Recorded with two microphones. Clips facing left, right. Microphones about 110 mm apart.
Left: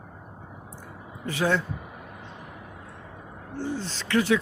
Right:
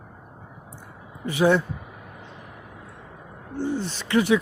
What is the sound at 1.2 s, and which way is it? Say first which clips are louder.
Speech: right 5 dB; 15° right (ahead or behind).